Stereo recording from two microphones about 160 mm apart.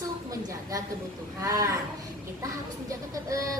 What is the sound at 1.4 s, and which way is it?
Speech, 20° right (ahead or behind).